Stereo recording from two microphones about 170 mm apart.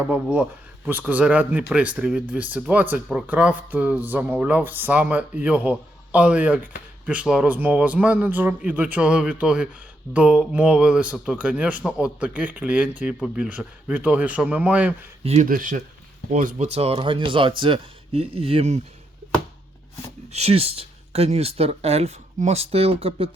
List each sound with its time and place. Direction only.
0.1 s speech: 10° right (ahead or behind)
15.2 s speech: 40° right (ahead or behind)
15.4 s speech: 50° right (ahead or behind); by 18.8 s 35° right (ahead or behind)
20.3 s speech: 35° right (ahead or behind)